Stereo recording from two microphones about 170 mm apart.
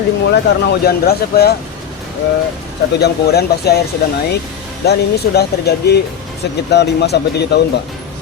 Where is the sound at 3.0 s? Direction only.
70° left (ahead or behind).